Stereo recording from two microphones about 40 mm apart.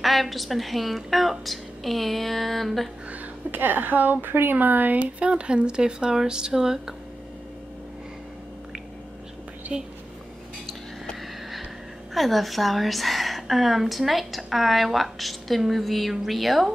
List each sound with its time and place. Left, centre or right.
0.0 s a woman's voice: centre
3.5 s speech: right
5.0 s speech: right
9.7 s speech: right
12.1 s a woman's voice: centre